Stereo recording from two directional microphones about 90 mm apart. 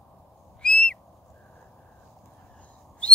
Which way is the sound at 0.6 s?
10° left (ahead or behind).